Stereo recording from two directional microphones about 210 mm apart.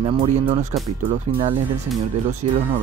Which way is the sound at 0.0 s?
30° right (ahead or behind).